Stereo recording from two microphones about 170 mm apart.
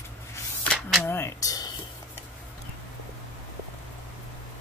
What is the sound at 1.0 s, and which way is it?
Speech, 15° left (ahead or behind).